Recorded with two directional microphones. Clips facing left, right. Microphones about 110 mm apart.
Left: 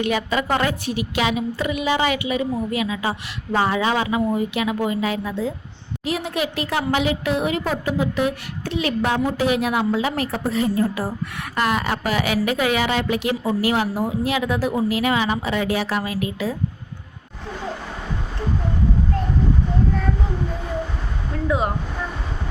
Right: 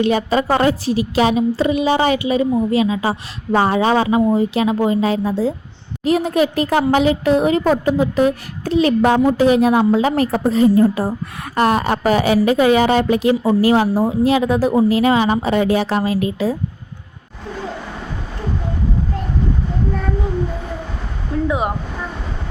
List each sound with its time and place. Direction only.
0.0 s a woman's voice: 35° right (ahead or behind)